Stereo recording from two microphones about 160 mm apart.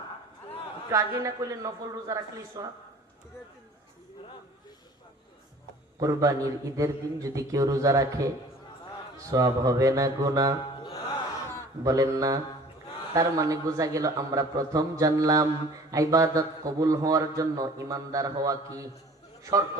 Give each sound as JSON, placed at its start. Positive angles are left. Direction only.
{"t": 0.9, "sound": "a man's voice", "side_deg": -20}
{"t": 6.0, "sound": "a man's voice", "side_deg": -20}
{"t": 9.3, "sound": "a man's voice", "side_deg": -20}
{"t": 11.8, "sound": "a man's voice", "side_deg": -20}